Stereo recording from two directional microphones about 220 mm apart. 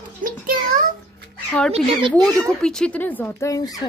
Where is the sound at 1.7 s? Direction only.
25° right (ahead or behind).